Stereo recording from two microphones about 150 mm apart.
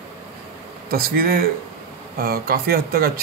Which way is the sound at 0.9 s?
85° right.